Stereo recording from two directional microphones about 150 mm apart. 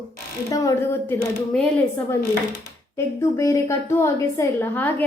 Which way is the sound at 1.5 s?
5° left (ahead or behind).